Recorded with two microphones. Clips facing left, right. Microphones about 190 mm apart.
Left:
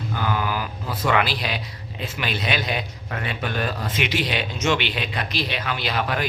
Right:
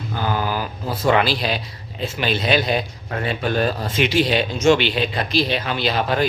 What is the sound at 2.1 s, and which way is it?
A man's voice, 30° right (ahead or behind).